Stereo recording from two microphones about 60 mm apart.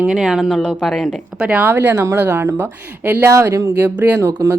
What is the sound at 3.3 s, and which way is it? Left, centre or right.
Speech, right.